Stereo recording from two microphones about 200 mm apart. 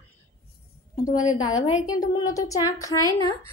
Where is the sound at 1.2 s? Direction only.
20° left (ahead or behind).